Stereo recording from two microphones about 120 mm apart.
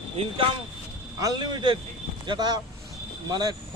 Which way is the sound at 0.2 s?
55° right (ahead or behind).